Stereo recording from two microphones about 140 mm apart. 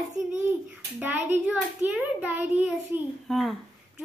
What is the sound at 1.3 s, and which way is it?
A child's voice, 10° right (ahead or behind).